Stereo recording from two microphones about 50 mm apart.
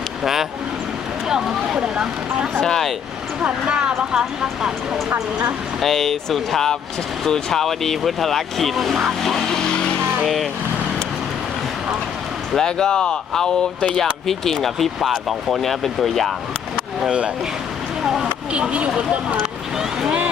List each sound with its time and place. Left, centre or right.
1.3 s speech: centre
2.6 s speech: centre
3.4 s speech: centre
5.8 s speech: centre
10.2 s speech: centre
12.5 s speech: centre
16.7 s a sound: centre
18.0 s speech: centre
18.5 s speech: right